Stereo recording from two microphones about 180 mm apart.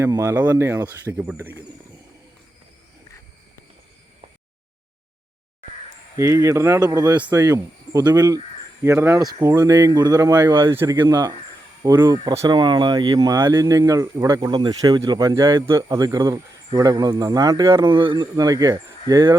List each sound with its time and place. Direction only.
0.0 s speech: 15° right (ahead or behind)
6.1 s speech: 15° right (ahead or behind)